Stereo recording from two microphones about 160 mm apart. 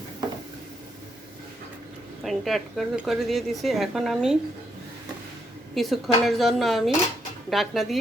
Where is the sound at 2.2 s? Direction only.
Centre (ahead or behind).